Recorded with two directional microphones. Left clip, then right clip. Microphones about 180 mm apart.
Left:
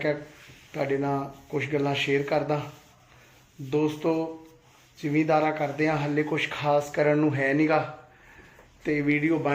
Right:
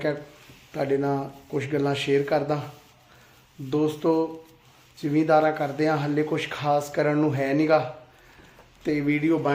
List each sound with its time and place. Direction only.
0.7 s speech: 15° right (ahead or behind)
3.7 s speech: 20° right (ahead or behind)
8.8 s speech: 15° right (ahead or behind)